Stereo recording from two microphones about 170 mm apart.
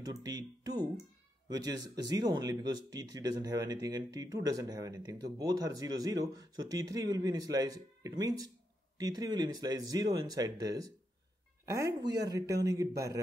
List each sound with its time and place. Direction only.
0.0 s speech: 20° right (ahead or behind)